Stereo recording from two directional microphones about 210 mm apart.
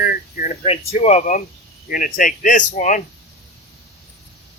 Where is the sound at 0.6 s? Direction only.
30° left (ahead or behind).